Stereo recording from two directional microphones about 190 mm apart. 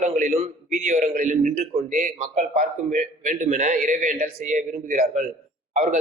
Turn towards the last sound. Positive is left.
turn(degrees=-40)  # may be behind; listen again after turning